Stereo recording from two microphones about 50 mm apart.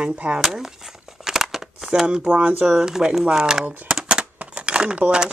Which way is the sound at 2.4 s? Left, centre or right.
Right.